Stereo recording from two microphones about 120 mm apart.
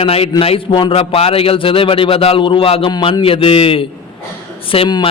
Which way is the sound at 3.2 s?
50° left (ahead or behind).